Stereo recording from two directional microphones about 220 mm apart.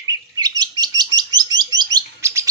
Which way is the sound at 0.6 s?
15° right (ahead or behind).